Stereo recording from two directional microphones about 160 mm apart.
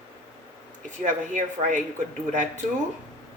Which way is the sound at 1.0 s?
50° right (ahead or behind).